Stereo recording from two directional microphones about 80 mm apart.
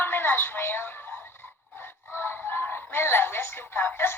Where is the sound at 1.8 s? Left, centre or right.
Left.